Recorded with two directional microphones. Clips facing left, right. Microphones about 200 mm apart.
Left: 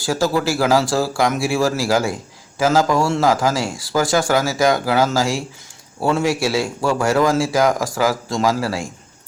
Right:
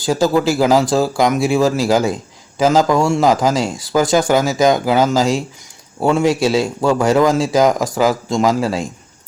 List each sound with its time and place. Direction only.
0.0 s a man's voice: 20° right (ahead or behind)